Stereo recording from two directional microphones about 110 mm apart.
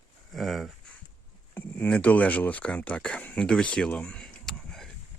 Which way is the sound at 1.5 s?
15° left (ahead or behind).